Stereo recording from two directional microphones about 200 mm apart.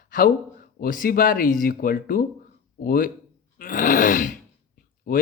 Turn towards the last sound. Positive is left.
turn(degrees=45)  # may be behind; listen again after turning